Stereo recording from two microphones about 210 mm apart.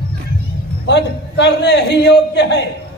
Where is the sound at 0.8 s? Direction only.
55° left (ahead or behind).